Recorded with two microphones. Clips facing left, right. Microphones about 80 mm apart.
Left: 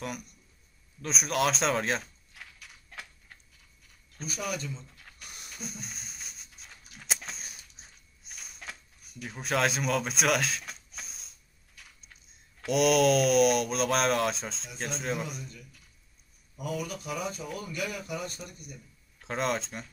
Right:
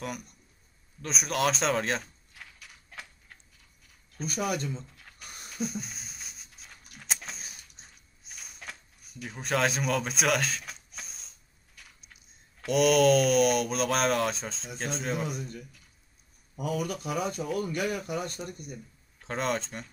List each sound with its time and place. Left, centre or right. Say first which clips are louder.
1.0 s a sound: even; centre
4.5 s speech: right 1 dB; right
4.8 s a sound: right 1 dB; centre
14.8 s speech: right 1 dB; centre
15.2 s speech: right 5 dB; right
19.1 s speech: even; centre